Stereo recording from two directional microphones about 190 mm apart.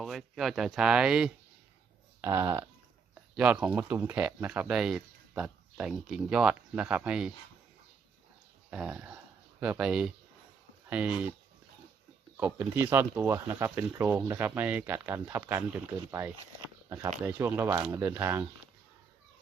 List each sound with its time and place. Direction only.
0.0 s speech: centre (ahead or behind)
2.2 s speech: 15° right (ahead or behind)
8.7 s speech: 5° right (ahead or behind)
12.4 s speech: 10° right (ahead or behind)